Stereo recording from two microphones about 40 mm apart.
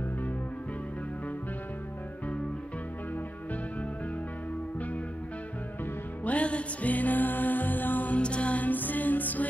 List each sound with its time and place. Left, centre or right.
6.2 s music: left
8.2 s music: left
8.6 s music: left